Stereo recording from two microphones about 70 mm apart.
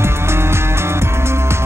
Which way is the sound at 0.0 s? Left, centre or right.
Right.